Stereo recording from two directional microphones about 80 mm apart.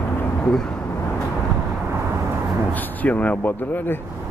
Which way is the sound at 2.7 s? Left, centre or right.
Centre.